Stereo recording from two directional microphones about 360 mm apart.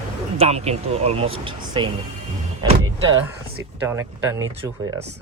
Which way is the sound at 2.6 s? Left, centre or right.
Centre.